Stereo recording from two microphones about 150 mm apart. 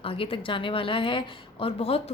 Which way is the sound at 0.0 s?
35° left (ahead or behind).